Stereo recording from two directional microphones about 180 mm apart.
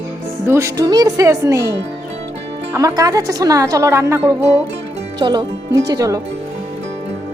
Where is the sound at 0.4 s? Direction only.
15° right (ahead or behind).